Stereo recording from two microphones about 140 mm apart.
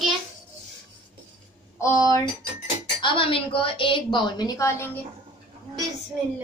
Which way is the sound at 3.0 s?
35° left (ahead or behind).